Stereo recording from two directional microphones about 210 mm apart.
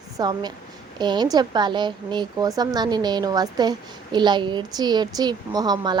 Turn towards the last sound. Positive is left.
turn(degrees=-20)  # may be behind; listen again after turning